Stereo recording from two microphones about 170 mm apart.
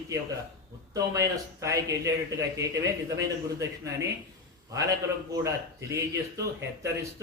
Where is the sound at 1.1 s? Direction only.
20° right (ahead or behind).